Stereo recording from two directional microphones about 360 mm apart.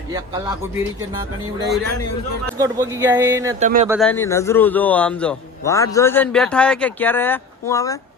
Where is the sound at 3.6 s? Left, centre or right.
Right.